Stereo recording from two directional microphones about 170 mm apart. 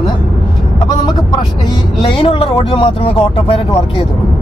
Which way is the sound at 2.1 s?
30° left (ahead or behind).